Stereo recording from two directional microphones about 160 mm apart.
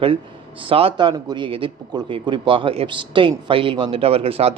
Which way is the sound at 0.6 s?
35° right (ahead or behind).